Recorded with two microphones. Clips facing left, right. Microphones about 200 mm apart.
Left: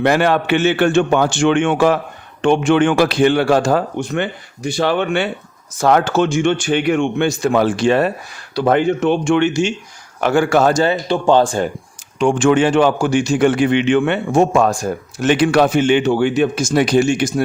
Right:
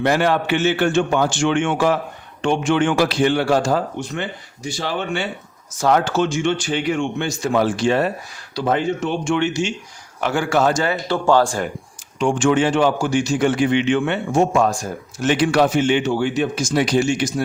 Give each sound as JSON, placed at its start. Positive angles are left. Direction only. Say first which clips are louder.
{"t": 0.0, "sound": "a man's voice", "louder": "left 3 dB", "side_deg": 65}
{"t": 10.8, "sound": "speech", "louder": "left 3 dB", "side_deg": 20}
{"t": 12.2, "sound": "a man's voice", "louder": "left 4 dB", "side_deg": 60}